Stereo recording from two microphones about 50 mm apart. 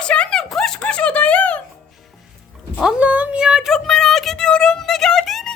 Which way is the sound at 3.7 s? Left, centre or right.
Centre.